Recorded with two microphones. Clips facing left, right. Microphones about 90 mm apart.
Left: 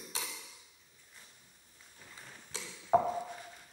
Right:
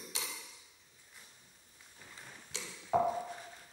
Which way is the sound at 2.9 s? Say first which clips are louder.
Left 3 dB; 40° left (ahead or behind).